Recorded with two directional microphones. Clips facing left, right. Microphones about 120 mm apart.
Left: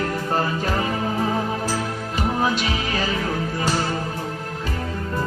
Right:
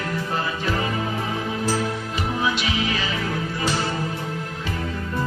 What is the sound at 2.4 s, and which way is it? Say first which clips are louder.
Music: left 1 dB; 40° left (ahead or behind).